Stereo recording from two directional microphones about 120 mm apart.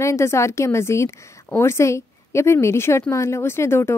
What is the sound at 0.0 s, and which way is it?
Speech, 25° left (ahead or behind).